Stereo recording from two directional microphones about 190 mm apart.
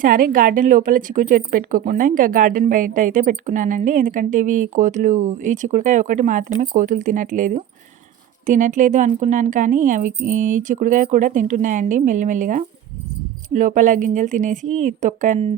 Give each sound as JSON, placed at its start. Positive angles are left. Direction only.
{"t": 0.0, "sound": "a woman's voice", "side_deg": -45}